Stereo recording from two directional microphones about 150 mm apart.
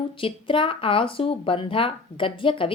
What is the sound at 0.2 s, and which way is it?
Speech, 35° left (ahead or behind).